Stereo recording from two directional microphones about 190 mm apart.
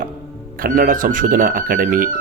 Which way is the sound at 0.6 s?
50° right (ahead or behind).